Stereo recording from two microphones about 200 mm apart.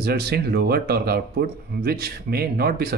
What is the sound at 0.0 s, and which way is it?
Speech, 55° right (ahead or behind).